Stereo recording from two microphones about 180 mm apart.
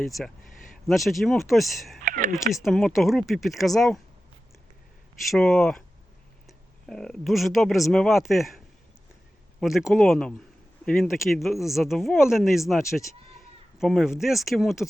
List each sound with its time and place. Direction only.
0.0 s speech: centre (ahead or behind)
2.0 s speech: 50° right (ahead or behind)
2.3 s speech: centre (ahead or behind)
5.3 s speech: 5° left (ahead or behind)